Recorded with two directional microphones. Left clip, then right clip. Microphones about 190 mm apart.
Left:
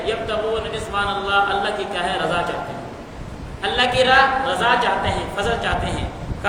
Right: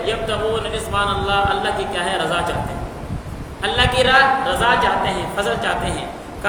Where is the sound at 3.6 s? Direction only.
Centre (ahead or behind).